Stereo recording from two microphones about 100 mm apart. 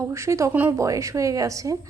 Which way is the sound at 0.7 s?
35° right (ahead or behind).